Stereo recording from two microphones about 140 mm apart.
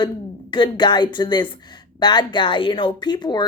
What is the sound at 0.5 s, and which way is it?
Speech, 35° left (ahead or behind).